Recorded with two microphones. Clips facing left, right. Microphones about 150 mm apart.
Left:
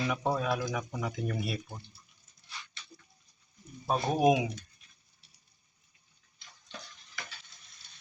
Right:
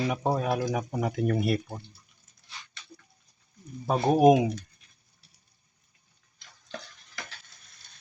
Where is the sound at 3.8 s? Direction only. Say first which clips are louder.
Right 6 dB; 55° right (ahead or behind).